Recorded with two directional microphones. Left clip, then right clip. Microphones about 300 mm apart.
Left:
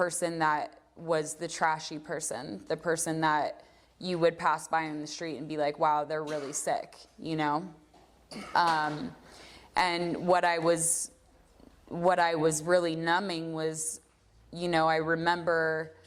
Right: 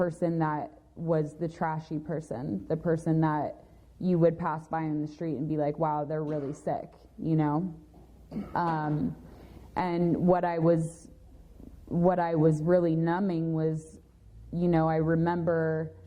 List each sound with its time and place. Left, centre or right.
0.0 s a woman's voice: centre
15.4 s speech: centre